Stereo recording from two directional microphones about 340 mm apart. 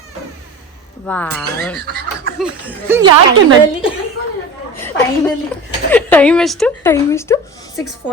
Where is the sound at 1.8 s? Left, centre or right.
Right.